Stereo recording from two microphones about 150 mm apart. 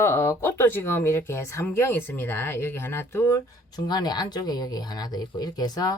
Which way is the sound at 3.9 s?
25° left (ahead or behind).